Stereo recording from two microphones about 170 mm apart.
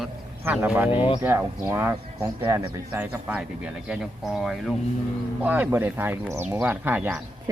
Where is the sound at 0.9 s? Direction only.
30° left (ahead or behind).